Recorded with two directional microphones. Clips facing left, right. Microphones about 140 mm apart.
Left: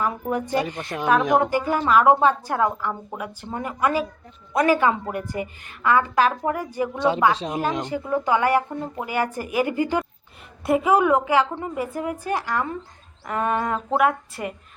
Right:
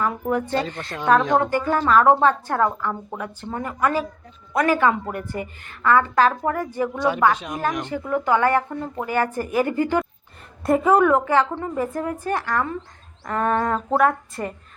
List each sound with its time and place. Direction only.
0.0 s a woman's voice: 15° left (ahead or behind)
7.6 s a woman's voice: 20° left (ahead or behind)
10.6 s a woman's voice: 5° left (ahead or behind)